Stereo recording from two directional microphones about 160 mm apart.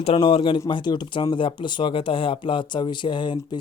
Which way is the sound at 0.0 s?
35° left (ahead or behind).